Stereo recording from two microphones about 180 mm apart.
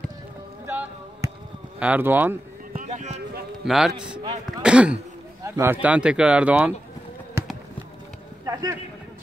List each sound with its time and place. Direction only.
0.7 s a sound: 10° right (ahead or behind)
1.8 s speech: 10° right (ahead or behind)
2.7 s a sound: 45° right (ahead or behind)
3.6 s a man's voice: centre (ahead or behind)
7.4 s run: 15° right (ahead or behind)
8.5 s a man's voice: 20° right (ahead or behind)